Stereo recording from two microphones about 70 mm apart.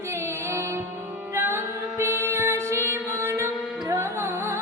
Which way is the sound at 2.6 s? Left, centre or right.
Left.